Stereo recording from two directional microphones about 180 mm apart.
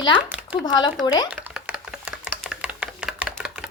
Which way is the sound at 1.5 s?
5° right (ahead or behind).